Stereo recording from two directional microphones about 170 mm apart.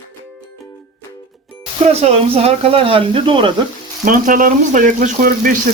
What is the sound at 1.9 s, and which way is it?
Speech, 40° right (ahead or behind).